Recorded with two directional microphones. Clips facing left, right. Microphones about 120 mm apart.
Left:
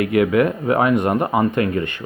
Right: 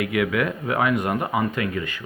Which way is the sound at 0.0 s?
40° left (ahead or behind).